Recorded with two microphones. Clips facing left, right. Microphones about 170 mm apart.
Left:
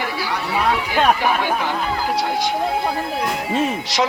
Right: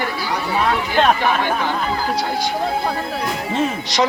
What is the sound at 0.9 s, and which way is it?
Speech, 10° left (ahead or behind).